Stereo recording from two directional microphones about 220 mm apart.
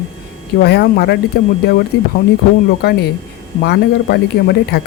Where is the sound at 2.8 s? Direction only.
45° left (ahead or behind).